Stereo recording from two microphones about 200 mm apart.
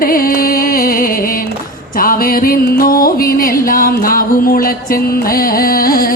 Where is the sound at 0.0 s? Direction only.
45° left (ahead or behind).